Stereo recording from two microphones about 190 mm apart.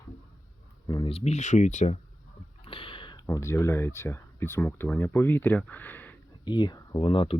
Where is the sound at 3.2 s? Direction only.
15° left (ahead or behind).